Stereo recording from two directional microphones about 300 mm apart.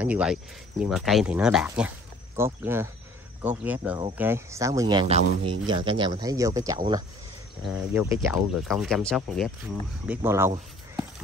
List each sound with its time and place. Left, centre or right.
0.0 s speech: centre